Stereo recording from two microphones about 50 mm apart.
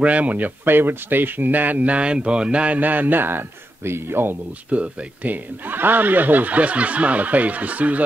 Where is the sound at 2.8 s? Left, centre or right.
Right.